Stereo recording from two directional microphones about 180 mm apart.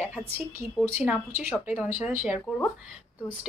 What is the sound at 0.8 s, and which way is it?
Speech, 10° right (ahead or behind).